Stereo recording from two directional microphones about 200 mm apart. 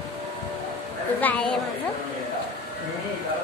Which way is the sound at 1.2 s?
5° left (ahead or behind).